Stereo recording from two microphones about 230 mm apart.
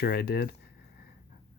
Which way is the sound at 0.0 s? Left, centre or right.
Left.